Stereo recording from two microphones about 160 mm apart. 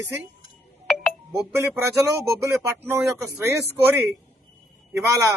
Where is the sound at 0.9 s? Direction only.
Centre (ahead or behind).